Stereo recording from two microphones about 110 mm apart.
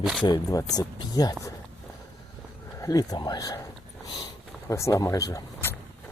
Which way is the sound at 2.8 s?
35° left (ahead or behind).